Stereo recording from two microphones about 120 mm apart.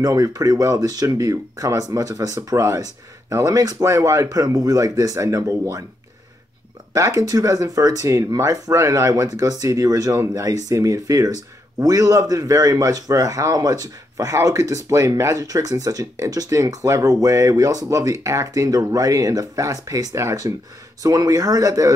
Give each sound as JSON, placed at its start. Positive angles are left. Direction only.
{"t": 0.0, "sound": "a man's voice", "side_deg": -30}
{"t": 6.9, "sound": "a man's voice", "side_deg": -30}